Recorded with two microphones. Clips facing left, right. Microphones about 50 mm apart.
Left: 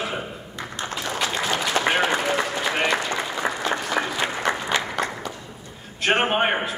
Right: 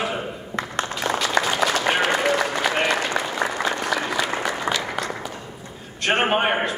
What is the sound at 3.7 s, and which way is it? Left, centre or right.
Applause, left.